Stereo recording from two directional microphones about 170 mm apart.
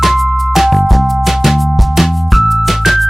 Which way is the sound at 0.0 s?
Centre (ahead or behind).